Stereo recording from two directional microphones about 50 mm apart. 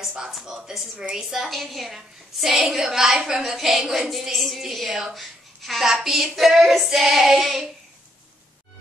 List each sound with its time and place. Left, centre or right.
0.2 s speech: centre
0.9 s a woman's voice: right
1.5 s a woman's voice: centre